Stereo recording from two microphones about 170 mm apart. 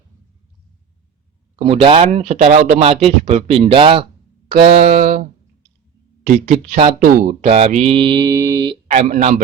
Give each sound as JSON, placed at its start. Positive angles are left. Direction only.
{"t": 1.5, "sound": "speech", "side_deg": -35}
{"t": 2.8, "sound": "speech", "side_deg": -35}
{"t": 4.7, "sound": "speech", "side_deg": -50}
{"t": 7.0, "sound": "speech", "side_deg": -55}
{"t": 7.4, "sound": "speech", "side_deg": -35}
{"t": 8.9, "sound": "speech", "side_deg": -45}